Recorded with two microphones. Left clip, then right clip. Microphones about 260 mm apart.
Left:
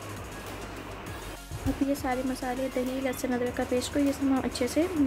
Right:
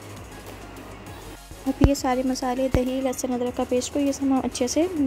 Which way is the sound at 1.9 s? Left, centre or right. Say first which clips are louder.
Right 8 dB; right.